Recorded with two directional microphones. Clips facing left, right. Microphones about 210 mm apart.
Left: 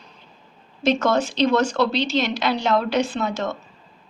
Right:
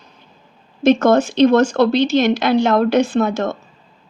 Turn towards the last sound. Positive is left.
turn(degrees=-50)  # may be behind; listen again after turning